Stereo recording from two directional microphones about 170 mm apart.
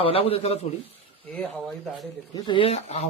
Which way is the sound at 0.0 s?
35° left (ahead or behind).